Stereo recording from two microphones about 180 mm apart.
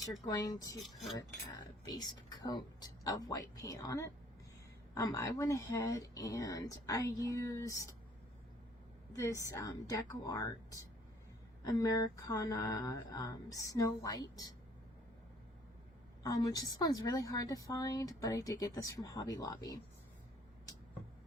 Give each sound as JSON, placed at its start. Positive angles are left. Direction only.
{"t": 0.3, "sound": "speech", "side_deg": 20}
{"t": 9.1, "sound": "a woman's voice", "side_deg": 15}
{"t": 16.2, "sound": "speech", "side_deg": 20}